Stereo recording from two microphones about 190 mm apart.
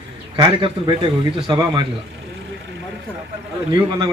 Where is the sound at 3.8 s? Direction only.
20° right (ahead or behind).